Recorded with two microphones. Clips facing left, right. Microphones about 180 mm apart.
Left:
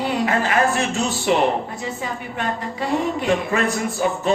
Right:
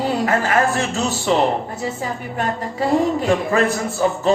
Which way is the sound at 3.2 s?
40° right (ahead or behind).